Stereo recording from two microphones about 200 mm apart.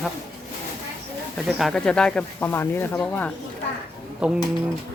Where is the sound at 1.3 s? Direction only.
Centre (ahead or behind).